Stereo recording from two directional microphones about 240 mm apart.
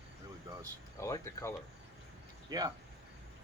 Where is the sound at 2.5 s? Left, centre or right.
Centre.